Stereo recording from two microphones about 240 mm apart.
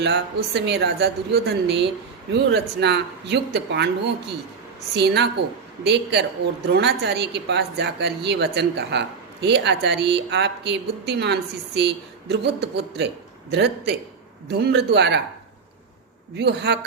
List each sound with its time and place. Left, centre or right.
0.0 s a woman's voice: right
16.4 s a woman's voice: right